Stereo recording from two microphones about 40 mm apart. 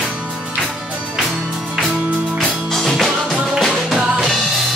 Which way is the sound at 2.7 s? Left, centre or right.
Centre.